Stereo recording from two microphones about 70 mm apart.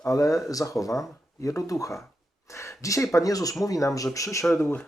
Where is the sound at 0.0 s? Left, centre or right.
Left.